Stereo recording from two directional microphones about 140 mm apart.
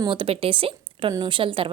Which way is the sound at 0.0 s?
40° right (ahead or behind).